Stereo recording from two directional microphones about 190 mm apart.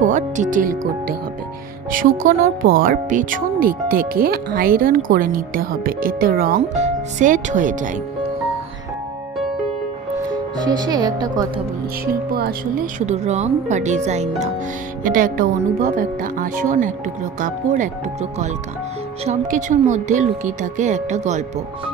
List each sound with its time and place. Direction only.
0.0 s speech: 45° right (ahead or behind)
10.3 s speech: 20° right (ahead or behind)
12.1 s speech: 55° right (ahead or behind)
13.0 s speech: 35° right (ahead or behind)